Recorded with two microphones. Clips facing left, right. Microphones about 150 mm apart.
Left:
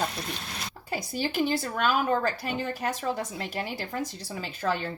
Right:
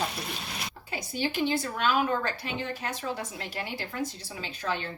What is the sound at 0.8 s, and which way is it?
Speech, 45° left (ahead or behind).